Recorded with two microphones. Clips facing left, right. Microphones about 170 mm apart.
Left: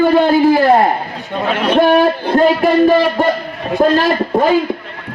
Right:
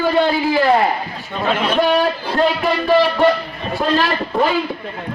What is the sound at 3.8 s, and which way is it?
Speech, 45° left (ahead or behind).